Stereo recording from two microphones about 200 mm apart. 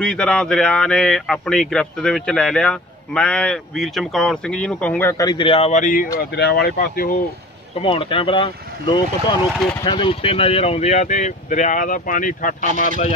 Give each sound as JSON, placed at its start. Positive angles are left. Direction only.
{"t": 0.0, "sound": "speech", "side_deg": 5}
{"t": 6.1, "sound": "speech", "side_deg": 55}
{"t": 7.8, "sound": "speech", "side_deg": 25}